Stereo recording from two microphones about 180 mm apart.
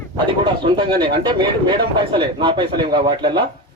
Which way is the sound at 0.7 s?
25° right (ahead or behind).